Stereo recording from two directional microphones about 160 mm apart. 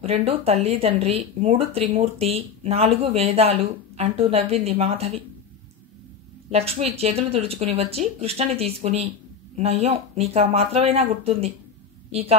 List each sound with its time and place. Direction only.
0.0 s speech: 40° right (ahead or behind)
6.5 s a woman's voice: 40° right (ahead or behind)